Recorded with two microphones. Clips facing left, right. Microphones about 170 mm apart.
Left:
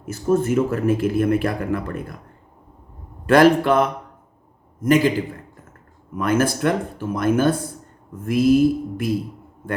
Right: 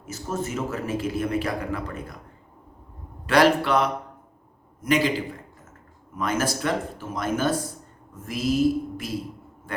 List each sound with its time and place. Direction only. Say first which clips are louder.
0.0 s speech: left 10 dB; 55° left (ahead or behind)
3.2 s a man's voice: left 5 dB; 50° left (ahead or behind)